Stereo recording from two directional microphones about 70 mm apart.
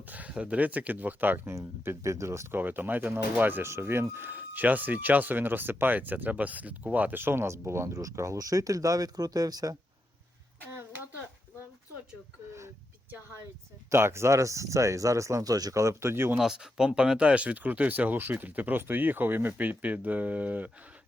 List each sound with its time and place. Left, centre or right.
0.0 s speech: right
1.5 s speech: right
2.6 s speech: right
13.9 s speech: right
16.4 s speech: centre